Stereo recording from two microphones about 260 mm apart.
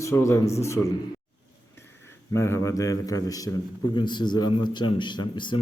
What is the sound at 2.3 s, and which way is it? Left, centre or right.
A man's voice, centre.